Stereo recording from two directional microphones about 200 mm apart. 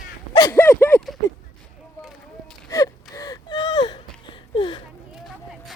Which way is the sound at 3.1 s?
20° left (ahead or behind).